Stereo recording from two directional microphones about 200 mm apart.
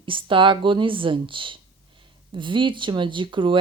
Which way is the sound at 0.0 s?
25° right (ahead or behind).